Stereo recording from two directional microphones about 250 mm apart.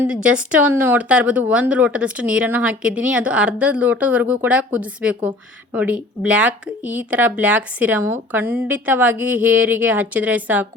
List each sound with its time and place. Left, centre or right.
0.0 s speech: centre